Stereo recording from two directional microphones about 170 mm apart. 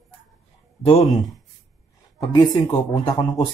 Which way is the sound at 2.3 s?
25° left (ahead or behind).